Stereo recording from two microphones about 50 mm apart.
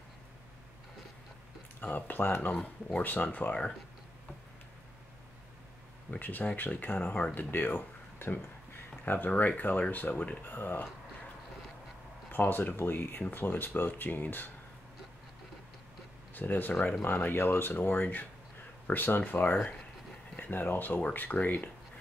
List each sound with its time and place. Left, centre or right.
1.8 s speech: left
6.0 s speech: left
7.0 s speech: left
7.3 s speech: left
10.4 s speech: left
12.3 s speech: left
16.3 s speech: left